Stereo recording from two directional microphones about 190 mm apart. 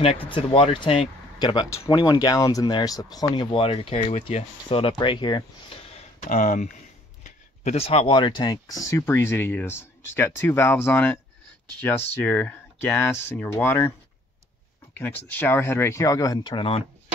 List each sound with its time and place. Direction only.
0.0 s speech: 30° left (ahead or behind); by 13.9 s 10° left (ahead or behind)
15.0 s speech: 10° left (ahead or behind); by 16.8 s 30° left (ahead or behind)